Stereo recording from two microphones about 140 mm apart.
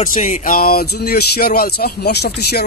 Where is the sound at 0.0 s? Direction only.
70° left (ahead or behind); by 0.8 s 90° left.